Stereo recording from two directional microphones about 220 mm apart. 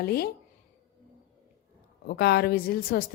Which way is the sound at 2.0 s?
45° left (ahead or behind).